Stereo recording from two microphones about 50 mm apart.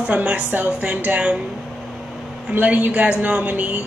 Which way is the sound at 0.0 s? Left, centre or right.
Right.